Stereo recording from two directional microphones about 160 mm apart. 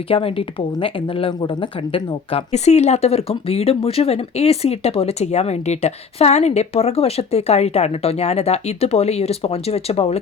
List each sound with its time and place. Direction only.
0.1 s speech: 35° left (ahead or behind)